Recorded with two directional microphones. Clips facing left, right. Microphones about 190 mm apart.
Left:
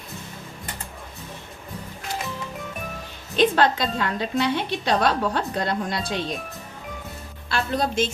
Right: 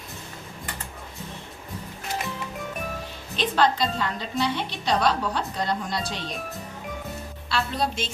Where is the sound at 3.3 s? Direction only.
55° left (ahead or behind).